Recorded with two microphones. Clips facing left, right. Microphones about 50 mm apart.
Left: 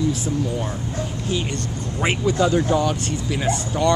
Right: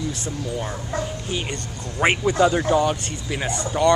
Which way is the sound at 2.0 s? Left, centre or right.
Right.